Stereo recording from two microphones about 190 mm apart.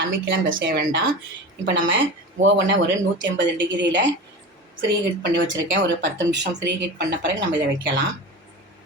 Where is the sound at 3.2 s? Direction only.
70° right (ahead or behind).